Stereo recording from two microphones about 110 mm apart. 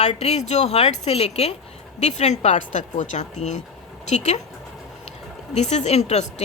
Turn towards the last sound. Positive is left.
turn(degrees=85)